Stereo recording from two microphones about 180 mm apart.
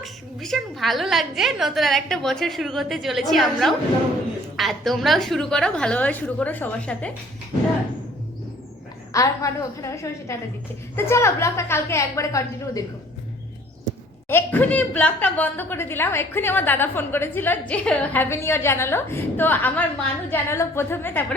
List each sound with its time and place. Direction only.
0.0 s a woman's voice: centre (ahead or behind)
9.1 s speech: 20° left (ahead or behind)
14.3 s speech: 10° left (ahead or behind)